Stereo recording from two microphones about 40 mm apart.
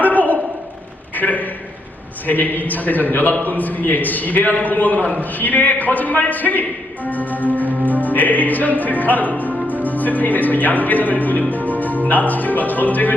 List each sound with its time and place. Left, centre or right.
0.0 s a sound: left
2.2 s speech: left
7.5 s music: left
8.0 s speech: left